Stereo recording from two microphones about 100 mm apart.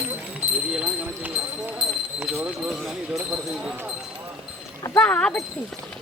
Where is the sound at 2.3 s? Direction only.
15° right (ahead or behind).